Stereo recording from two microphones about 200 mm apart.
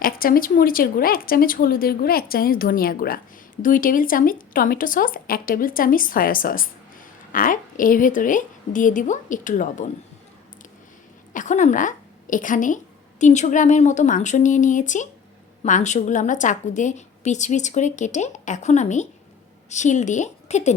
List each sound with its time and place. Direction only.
0.0 s a woman's voice: 45° left (ahead or behind)
11.3 s a woman's voice: 40° left (ahead or behind)